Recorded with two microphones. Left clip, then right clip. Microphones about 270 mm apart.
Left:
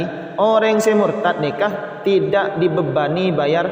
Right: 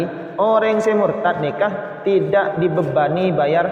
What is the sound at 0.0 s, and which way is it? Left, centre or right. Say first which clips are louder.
A man's voice: left 1 dB; left.